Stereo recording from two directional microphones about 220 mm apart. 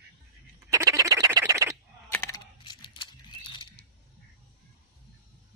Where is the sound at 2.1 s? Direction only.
15° left (ahead or behind).